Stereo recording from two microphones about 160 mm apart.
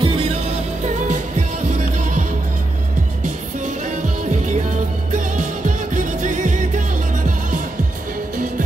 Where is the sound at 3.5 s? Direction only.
50° right (ahead or behind).